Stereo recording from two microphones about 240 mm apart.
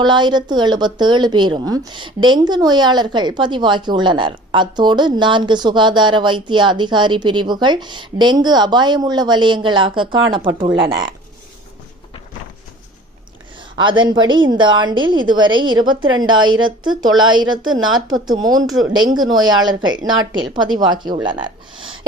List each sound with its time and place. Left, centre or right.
0.0 s a woman's voice: centre
13.7 s a woman's voice: centre
16.2 s a woman's voice: right
16.8 s a woman's voice: centre